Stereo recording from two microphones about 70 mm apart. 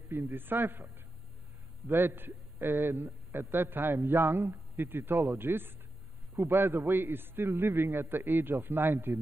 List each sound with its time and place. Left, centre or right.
0.1 s a man's voice: right